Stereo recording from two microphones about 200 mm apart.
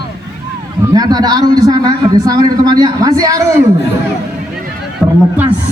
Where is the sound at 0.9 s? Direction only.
20° right (ahead or behind).